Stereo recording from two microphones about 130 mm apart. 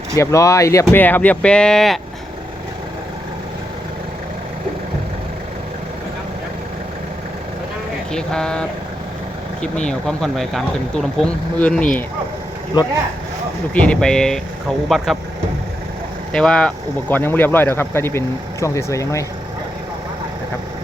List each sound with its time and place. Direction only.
0.2 s speech: 25° left (ahead or behind); by 2.0 s 5° left (ahead or behind)
8.1 s speech: 5° left (ahead or behind)
9.8 s speech: 5° left (ahead or behind)
13.7 s speech: 10° left (ahead or behind)
16.3 s speech: 5° left (ahead or behind); by 19.2 s 25° left (ahead or behind)